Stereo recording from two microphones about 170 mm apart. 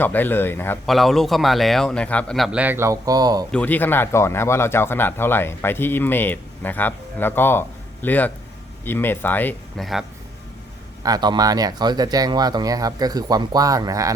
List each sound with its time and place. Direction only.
0.0 s speech: 10° left (ahead or behind)
0.9 s a man's voice: centre (ahead or behind); by 3.4 s 20° right (ahead or behind)
3.5 s speech: 10° left (ahead or behind)
9.8 s a man's voice: centre (ahead or behind)
11.0 s speech: 25° right (ahead or behind)